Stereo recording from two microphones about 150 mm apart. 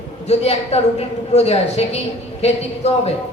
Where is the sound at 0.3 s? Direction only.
45° left (ahead or behind).